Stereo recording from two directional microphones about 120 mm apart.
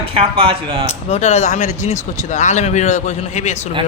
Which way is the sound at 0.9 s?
65° left (ahead or behind).